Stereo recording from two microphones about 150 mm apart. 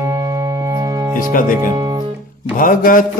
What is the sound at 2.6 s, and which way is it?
Music, 65° left (ahead or behind).